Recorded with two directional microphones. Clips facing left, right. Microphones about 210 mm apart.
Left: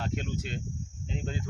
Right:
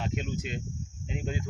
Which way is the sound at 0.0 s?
5° right (ahead or behind).